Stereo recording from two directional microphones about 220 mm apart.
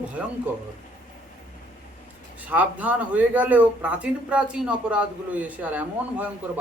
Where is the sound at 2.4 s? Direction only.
5° right (ahead or behind).